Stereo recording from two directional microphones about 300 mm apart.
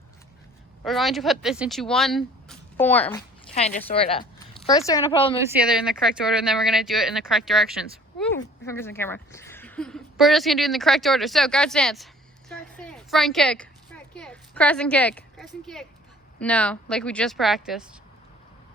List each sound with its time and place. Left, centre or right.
0.9 s a woman's voice: centre
3.5 s speech: left
5.4 s a woman's voice: centre
12.5 s a sound: centre
16.4 s a woman's voice: centre